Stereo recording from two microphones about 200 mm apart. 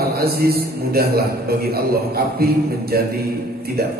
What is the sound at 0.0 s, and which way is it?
A man's voice, 50° right (ahead or behind).